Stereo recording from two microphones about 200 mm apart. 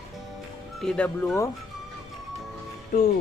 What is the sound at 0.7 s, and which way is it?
Speech, 5° left (ahead or behind).